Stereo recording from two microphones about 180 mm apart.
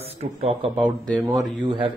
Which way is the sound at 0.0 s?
35° right (ahead or behind).